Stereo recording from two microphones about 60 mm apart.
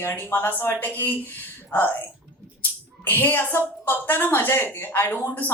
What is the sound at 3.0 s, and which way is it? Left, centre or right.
A woman's voice, left.